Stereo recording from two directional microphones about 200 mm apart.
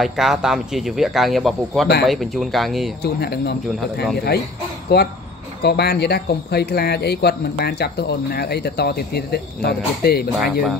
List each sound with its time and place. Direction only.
0.0 s speech: centre (ahead or behind)
3.0 s speech: 55° left (ahead or behind)
4.9 s speech: 55° left (ahead or behind)